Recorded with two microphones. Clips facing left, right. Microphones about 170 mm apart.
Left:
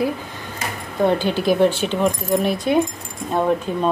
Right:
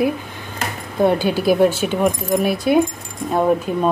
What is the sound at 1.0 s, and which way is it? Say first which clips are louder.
A woman's voice: right 2 dB; 10° right (ahead or behind).